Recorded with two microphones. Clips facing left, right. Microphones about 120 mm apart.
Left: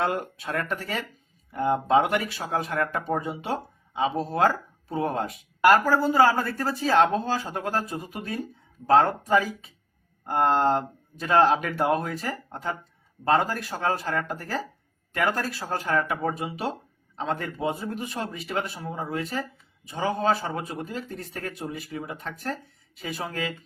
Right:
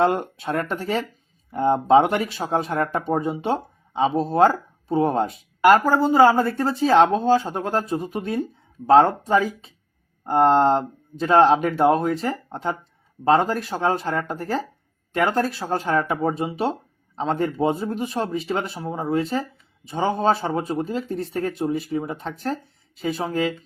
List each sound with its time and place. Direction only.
0.0 s speech: 30° right (ahead or behind)